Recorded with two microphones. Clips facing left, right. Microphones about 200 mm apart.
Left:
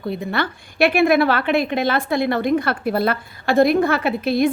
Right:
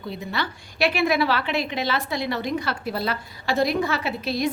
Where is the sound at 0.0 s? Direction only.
55° left (ahead or behind).